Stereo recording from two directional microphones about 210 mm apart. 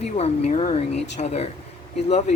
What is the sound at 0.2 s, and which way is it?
Speech, 30° left (ahead or behind).